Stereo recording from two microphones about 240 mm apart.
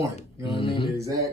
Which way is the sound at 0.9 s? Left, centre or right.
Centre.